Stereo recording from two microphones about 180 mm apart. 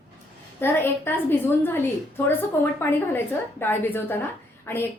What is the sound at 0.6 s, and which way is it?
A woman's voice, 10° left (ahead or behind).